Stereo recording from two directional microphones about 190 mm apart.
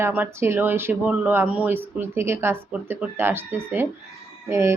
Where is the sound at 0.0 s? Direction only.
10° right (ahead or behind).